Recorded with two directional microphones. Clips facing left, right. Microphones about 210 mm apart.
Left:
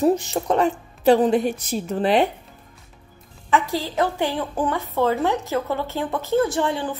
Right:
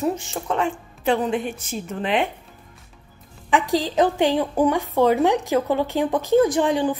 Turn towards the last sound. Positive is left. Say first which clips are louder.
# right 4 dB
turn(degrees=-15)  # may be behind; listen again after turning